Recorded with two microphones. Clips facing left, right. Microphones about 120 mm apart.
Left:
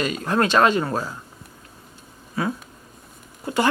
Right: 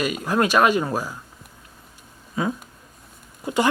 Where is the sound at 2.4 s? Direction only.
20° right (ahead or behind).